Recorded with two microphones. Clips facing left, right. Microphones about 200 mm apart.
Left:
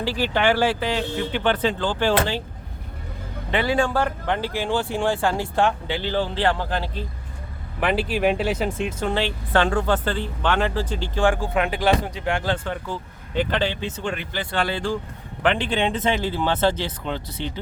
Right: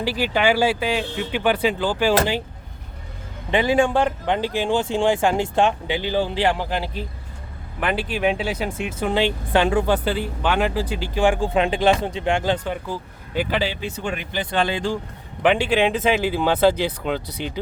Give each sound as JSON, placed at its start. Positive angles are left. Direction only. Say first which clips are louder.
{"t": 0.0, "sound": "speech", "louder": "right 1 dB", "side_deg": -10}
{"t": 3.5, "sound": "speech", "louder": "right 3 dB", "side_deg": -15}
{"t": 7.8, "sound": "speech", "louder": "left 1 dB", "side_deg": 5}
{"t": 11.3, "sound": "speech", "louder": "right 3 dB", "side_deg": -25}